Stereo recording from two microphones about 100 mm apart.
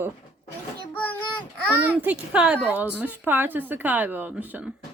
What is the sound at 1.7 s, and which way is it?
Speech, 15° right (ahead or behind).